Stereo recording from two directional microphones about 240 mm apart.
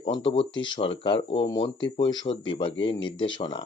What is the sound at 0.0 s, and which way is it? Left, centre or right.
Speech, centre.